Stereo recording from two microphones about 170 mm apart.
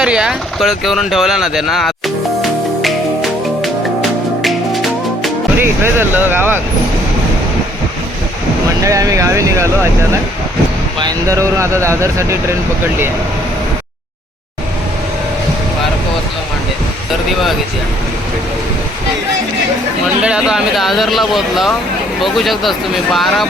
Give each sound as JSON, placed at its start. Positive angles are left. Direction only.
{"t": 0.0, "sound": "speech", "side_deg": -5}
{"t": 2.4, "sound": "music", "side_deg": 0}
{"t": 5.5, "sound": "speech", "side_deg": -10}
{"t": 8.8, "sound": "speech", "side_deg": -20}
{"t": 11.0, "sound": "speech", "side_deg": -20}
{"t": 20.2, "sound": "speech", "side_deg": -5}